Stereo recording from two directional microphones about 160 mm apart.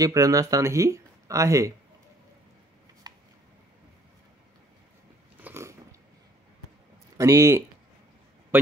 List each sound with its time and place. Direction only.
0.0 s speech: 20° right (ahead or behind)
3.1 s a sound: 25° right (ahead or behind)
5.4 s biting: 15° right (ahead or behind)
7.2 s speech: 20° right (ahead or behind)